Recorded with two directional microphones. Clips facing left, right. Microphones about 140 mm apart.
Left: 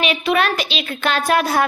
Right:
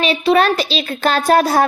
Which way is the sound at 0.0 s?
35° right (ahead or behind).